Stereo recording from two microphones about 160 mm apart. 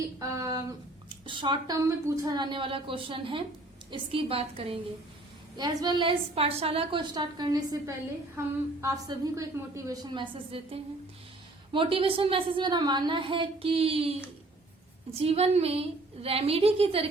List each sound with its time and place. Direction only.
0.2 s a sound: 20° right (ahead or behind)
1.2 s a woman's voice: 30° right (ahead or behind)
5.5 s a woman's voice: 25° right (ahead or behind)
15.2 s a woman's voice: 40° right (ahead or behind)